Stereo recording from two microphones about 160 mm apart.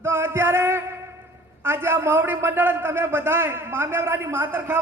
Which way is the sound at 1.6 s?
15° right (ahead or behind).